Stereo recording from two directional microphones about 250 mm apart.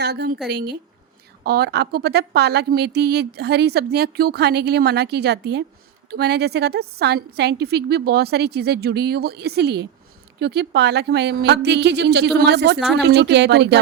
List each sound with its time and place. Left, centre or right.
0.0 s a woman's voice: right